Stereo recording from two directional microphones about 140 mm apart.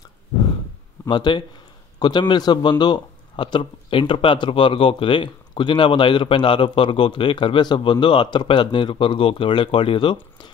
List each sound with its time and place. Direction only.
1.0 s speech: 35° left (ahead or behind)